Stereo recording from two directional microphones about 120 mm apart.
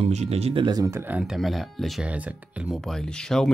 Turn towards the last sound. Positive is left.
turn(degrees=5)  # may be behind; listen again after turning